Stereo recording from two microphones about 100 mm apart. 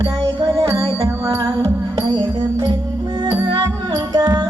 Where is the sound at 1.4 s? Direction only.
35° right (ahead or behind).